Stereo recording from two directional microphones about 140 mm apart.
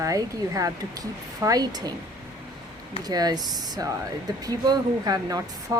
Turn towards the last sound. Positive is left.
turn(degrees=-25)  # may be behind; listen again after turning